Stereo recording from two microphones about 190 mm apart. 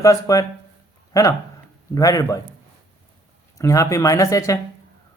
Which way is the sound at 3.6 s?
15° left (ahead or behind).